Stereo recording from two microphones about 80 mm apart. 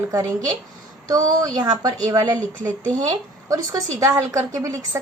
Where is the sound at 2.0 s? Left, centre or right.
Right.